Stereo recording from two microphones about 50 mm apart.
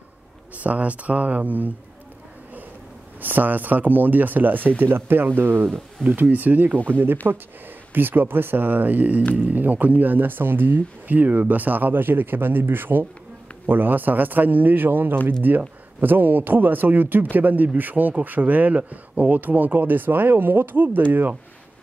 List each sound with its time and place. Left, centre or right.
0.6 s speech: right
3.2 s speech: right
6.0 s speech: right